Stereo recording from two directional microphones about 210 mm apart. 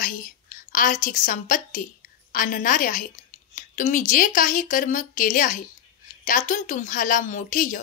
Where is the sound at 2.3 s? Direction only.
40° left (ahead or behind).